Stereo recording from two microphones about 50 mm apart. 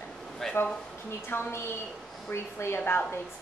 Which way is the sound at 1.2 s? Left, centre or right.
Left.